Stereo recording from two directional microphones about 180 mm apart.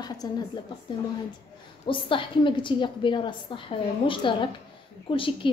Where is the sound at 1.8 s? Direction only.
30° left (ahead or behind).